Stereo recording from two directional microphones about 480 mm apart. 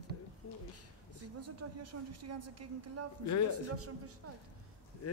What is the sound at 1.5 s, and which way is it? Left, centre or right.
A woman's voice, right.